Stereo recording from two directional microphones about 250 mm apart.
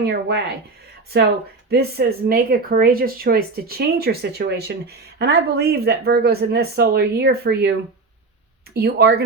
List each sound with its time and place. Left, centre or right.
0.0 s speech: right
1.7 s speech: right